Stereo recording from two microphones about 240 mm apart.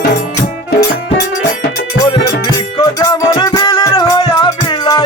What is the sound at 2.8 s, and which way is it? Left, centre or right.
Music, centre.